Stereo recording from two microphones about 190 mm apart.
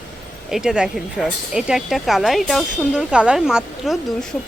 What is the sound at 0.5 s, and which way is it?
Speech, 5° right (ahead or behind).